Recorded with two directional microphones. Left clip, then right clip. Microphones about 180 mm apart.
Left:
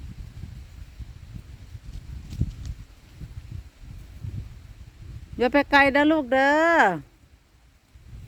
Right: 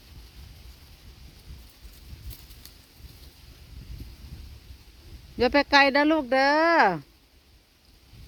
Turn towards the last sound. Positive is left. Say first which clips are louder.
# left 1 dB
turn(degrees=25)  # may be behind; listen again after turning